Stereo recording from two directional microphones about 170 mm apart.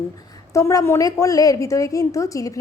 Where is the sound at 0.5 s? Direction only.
20° left (ahead or behind).